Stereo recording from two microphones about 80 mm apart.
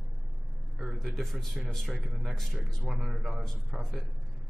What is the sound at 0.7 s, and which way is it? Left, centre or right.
Speech, centre.